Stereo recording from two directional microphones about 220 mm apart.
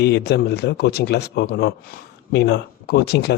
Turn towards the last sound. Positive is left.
turn(degrees=50)  # may be behind; listen again after turning